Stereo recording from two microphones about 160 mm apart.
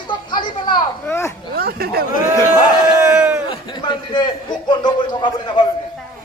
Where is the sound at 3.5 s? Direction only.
30° left (ahead or behind).